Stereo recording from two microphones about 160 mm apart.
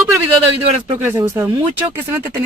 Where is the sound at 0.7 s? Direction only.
40° right (ahead or behind).